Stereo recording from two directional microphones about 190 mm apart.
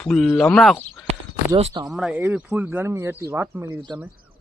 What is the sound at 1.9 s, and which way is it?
Speech, 5° right (ahead or behind).